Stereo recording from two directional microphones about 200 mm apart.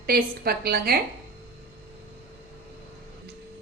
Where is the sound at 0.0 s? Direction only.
50° right (ahead or behind).